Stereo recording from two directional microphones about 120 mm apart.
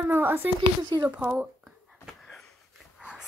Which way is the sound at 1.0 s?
15° right (ahead or behind).